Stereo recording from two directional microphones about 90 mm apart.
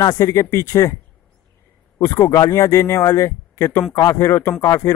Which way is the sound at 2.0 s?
40° left (ahead or behind).